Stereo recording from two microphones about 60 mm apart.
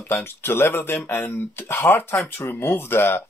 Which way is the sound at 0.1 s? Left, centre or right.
Left.